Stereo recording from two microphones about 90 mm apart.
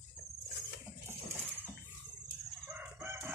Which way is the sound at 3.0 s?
25° right (ahead or behind).